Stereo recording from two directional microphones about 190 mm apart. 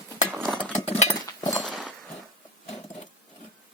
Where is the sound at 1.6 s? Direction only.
Centre (ahead or behind).